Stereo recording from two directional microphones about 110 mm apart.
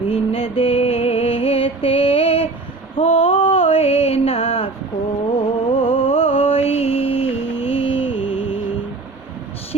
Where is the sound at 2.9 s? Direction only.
60° left (ahead or behind).